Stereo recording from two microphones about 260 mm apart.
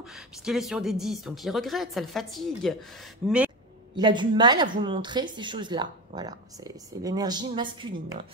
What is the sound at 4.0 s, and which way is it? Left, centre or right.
Speech, centre.